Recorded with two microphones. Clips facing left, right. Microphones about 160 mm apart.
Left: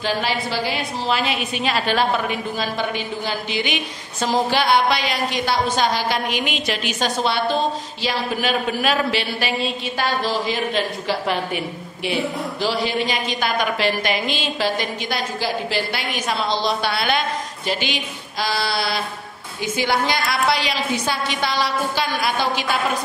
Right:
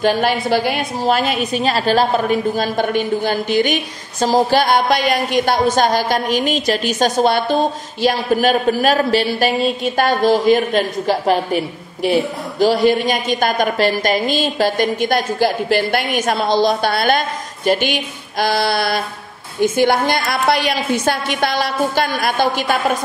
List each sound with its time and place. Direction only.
0.0 s a man's voice: 55° right (ahead or behind)